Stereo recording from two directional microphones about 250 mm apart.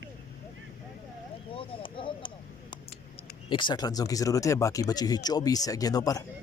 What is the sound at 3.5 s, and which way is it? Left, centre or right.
Speech, centre.